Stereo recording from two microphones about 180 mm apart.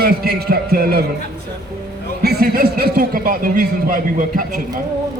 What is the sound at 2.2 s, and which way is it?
A man's voice, 60° right (ahead or behind).